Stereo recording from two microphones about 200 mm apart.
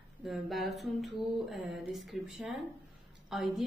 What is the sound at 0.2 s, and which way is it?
A woman's voice, centre (ahead or behind).